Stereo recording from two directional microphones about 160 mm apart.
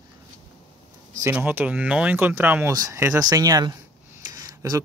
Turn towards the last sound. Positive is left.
turn(degrees=-20)  # may be behind; listen again after turning